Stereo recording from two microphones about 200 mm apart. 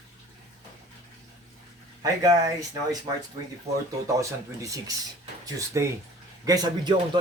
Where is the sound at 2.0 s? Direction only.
15° right (ahead or behind).